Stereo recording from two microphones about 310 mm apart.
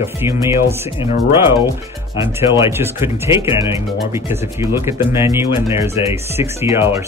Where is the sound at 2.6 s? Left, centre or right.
Centre.